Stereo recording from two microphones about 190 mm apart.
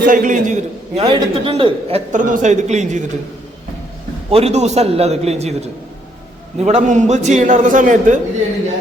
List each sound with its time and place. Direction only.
0.0 s a man's voice: 45° right (ahead or behind)
1.0 s a man's voice: 30° right (ahead or behind)
2.1 s a man's voice: 40° right (ahead or behind)
4.3 s a man's voice: 35° right (ahead or behind)